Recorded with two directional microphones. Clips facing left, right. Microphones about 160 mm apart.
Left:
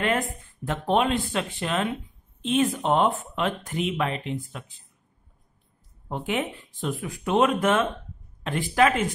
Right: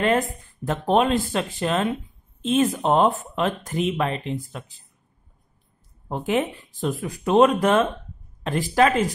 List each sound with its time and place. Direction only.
0.7 s speech: 40° right (ahead or behind)
6.0 s speech: 35° right (ahead or behind)